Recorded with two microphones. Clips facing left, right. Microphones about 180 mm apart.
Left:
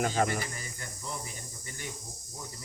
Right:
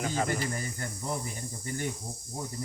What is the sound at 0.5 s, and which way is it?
Speech, 50° right (ahead or behind).